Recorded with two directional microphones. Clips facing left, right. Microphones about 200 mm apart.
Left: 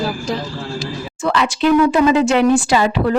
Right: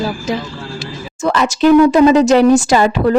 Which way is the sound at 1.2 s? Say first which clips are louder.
Right 4 dB; 45° right (ahead or behind).